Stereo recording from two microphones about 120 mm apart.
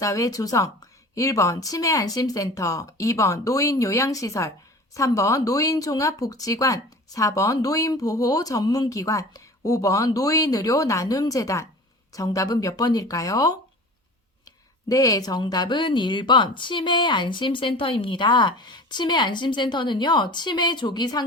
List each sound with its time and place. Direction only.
0.0 s speech: 30° left (ahead or behind)